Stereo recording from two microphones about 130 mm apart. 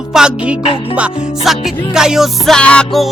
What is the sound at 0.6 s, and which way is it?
Music, 45° left (ahead or behind).